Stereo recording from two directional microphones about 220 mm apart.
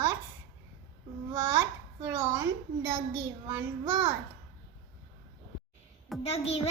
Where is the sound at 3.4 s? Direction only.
10° right (ahead or behind).